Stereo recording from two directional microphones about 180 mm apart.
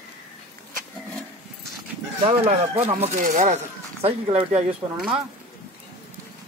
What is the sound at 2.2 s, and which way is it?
Speech, 35° right (ahead or behind).